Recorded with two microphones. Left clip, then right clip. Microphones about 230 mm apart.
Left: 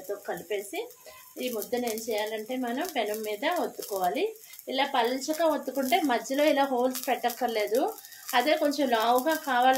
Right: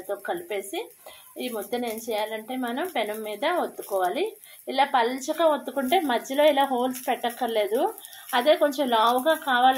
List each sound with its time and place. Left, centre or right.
0.5 s speech: right